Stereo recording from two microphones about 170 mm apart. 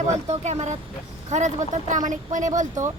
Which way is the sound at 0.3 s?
40° right (ahead or behind).